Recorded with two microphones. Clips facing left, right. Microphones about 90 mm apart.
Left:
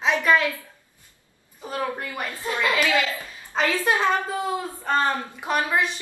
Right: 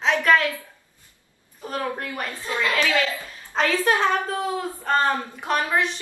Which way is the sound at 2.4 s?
20° left (ahead or behind).